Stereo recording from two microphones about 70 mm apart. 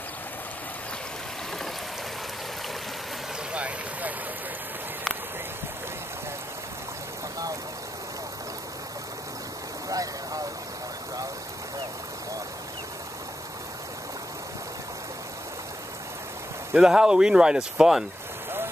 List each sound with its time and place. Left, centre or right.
3.5 s vehicle: centre
9.8 s vehicle: right
16.7 s speech: centre